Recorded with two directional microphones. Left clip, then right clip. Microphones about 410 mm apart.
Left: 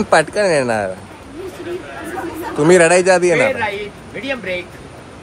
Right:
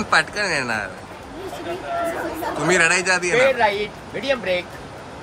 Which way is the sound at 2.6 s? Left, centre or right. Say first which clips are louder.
Left 7 dB; centre.